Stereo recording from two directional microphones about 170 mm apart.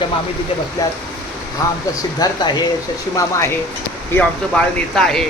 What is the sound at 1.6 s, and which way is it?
Speech, 20° left (ahead or behind).